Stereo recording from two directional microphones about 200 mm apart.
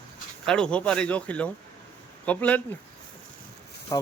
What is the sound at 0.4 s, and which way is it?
Speech, 5° left (ahead or behind).